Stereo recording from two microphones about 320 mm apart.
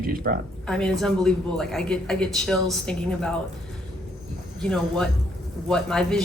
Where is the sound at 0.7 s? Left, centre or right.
Centre.